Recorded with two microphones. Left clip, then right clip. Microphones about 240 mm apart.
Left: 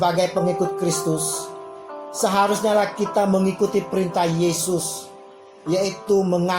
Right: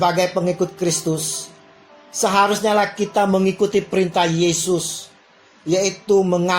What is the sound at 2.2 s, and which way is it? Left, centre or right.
Speech, right.